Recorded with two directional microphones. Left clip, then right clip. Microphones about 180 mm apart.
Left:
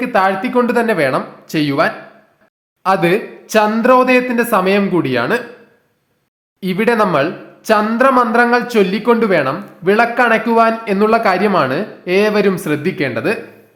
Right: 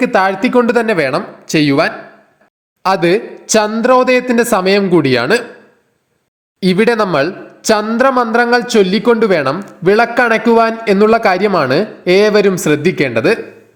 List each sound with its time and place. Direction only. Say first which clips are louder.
0.0 s speech: right 2 dB; 35° right (ahead or behind)
6.6 s a man's voice: right 2 dB; 35° right (ahead or behind)